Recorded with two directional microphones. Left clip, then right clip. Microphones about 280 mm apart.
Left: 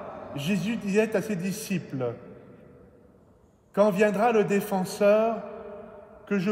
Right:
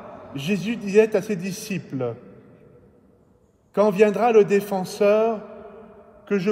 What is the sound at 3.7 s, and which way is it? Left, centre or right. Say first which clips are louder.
A man's voice: right 4 dB; right.